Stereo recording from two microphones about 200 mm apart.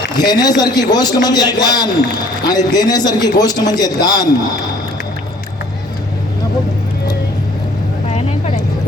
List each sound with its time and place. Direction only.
0.2 s a man's voice: 20° left (ahead or behind)